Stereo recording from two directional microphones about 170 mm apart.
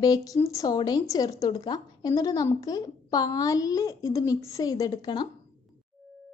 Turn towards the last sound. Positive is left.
turn(degrees=25)  # may be behind; listen again after turning